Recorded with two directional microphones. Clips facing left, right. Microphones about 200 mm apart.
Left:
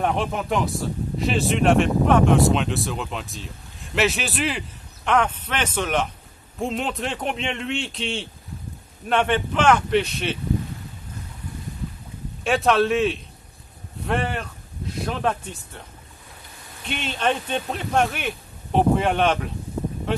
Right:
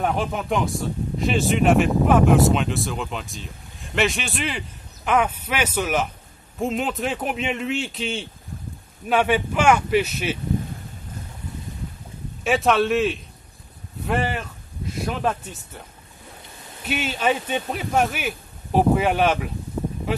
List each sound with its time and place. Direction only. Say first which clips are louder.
0.0 s speech: even; centre (ahead or behind)
12.4 s speech: even; centre (ahead or behind)
16.8 s speech: right 2 dB; 5° right (ahead or behind)